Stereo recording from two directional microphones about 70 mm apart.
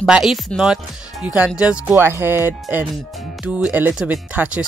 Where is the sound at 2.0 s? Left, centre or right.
Right.